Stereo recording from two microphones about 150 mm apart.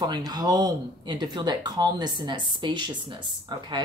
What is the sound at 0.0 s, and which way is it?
Speech, 25° right (ahead or behind).